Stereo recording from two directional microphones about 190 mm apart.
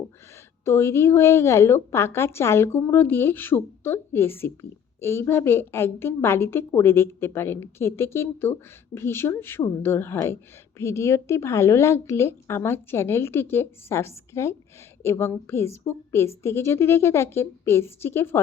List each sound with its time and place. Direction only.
0.6 s a woman's voice: 15° left (ahead or behind)